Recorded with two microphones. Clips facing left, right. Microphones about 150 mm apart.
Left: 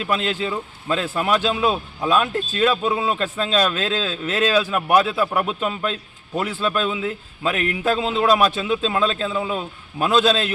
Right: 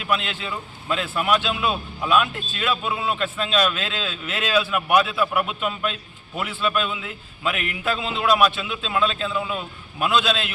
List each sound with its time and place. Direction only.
0.0 s a man's voice: 35° left (ahead or behind)